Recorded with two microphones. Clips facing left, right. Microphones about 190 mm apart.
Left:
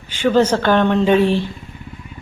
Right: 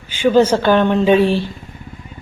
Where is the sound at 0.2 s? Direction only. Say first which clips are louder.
Right 2 dB; 10° right (ahead or behind).